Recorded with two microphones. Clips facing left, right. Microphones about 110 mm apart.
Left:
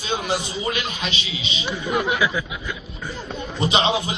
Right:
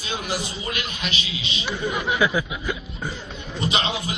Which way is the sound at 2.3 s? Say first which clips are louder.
Right 2 dB; 10° right (ahead or behind).